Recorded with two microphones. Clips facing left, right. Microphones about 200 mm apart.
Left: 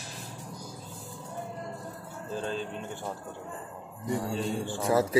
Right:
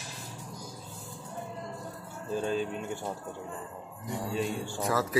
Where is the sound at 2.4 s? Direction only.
10° right (ahead or behind).